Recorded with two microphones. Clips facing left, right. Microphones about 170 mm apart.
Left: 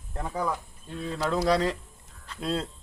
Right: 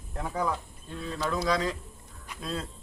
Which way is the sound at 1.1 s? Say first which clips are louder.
Left 4 dB; 35° left (ahead or behind).